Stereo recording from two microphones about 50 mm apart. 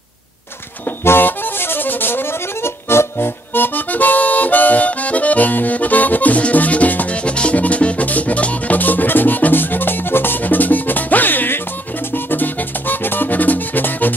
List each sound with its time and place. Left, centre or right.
0.8 s accordion: left
7.2 s music: left